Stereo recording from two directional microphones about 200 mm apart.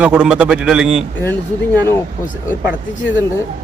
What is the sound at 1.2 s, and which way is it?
Speech, 10° left (ahead or behind).